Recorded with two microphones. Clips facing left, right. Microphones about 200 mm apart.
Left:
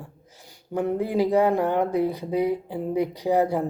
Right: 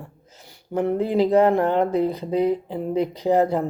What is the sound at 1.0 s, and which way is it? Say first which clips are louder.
Speech: right 4 dB; 15° left (ahead or behind).